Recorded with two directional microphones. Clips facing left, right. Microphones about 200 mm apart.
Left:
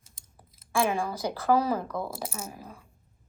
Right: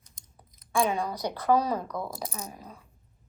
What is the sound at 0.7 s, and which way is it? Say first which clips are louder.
A woman's voice: even; 5° left (ahead or behind).